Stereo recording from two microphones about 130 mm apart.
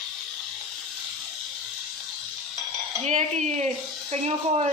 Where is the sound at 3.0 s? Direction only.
60° right (ahead or behind).